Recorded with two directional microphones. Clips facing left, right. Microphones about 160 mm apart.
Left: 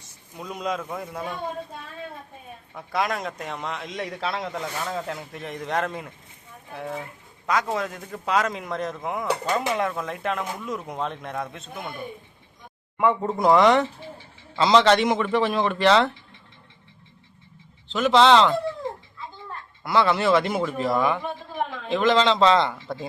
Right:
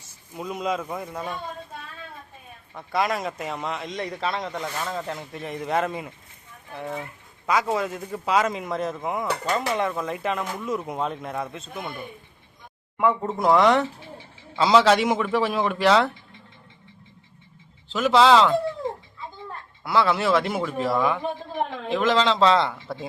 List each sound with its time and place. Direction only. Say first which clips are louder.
0.0 s a man's voice: right 4 dB; centre (ahead or behind)
2.7 s a man's voice: right 1 dB; centre (ahead or behind)
9.4 s a man's voice: right 1 dB; 10° left (ahead or behind)
13.0 s a man's voice: left 1 dB; centre (ahead or behind)
17.8 s a man's voice: even; 5° right (ahead or behind)
19.8 s a man's voice: left 1 dB; centre (ahead or behind)